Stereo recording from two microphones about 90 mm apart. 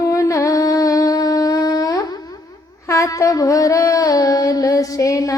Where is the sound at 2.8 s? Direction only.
35° left (ahead or behind).